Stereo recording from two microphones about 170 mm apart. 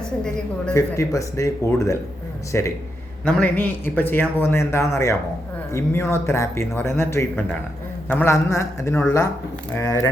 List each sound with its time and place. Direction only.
0.7 s speech: 20° left (ahead or behind)